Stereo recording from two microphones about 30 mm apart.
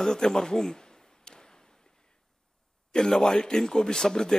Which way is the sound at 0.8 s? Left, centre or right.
Left.